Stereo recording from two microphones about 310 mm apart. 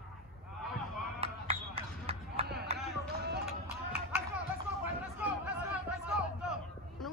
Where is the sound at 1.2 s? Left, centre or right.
Centre.